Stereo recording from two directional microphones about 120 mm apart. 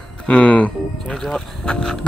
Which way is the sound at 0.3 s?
10° left (ahead or behind).